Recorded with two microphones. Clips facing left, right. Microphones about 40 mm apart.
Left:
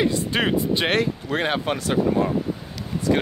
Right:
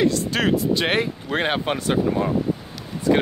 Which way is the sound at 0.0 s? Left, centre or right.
Centre.